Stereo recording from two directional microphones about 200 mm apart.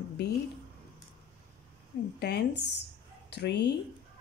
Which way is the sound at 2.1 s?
55° left (ahead or behind).